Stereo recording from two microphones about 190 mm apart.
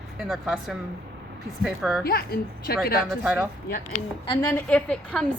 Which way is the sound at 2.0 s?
55° left (ahead or behind).